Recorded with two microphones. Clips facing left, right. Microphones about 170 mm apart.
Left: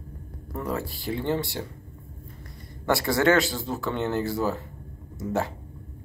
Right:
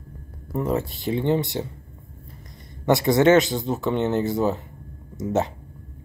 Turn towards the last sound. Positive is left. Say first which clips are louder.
# right 4 dB
turn(degrees=-20)  # may be behind; listen again after turning